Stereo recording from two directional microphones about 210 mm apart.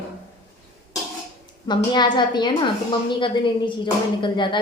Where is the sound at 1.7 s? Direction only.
20° left (ahead or behind).